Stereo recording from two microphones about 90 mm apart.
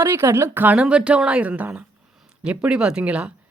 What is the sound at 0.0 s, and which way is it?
Speech, 30° right (ahead or behind).